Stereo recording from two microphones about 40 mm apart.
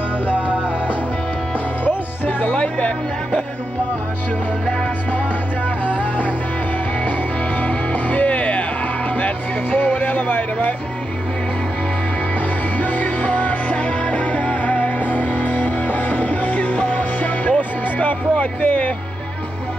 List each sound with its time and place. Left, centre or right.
2.5 s speech: left
5.9 s music: left
7.6 s music: left
9.1 s music: left
12.7 s music: left